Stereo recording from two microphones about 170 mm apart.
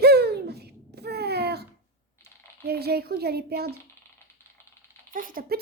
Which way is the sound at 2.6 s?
70° right (ahead or behind).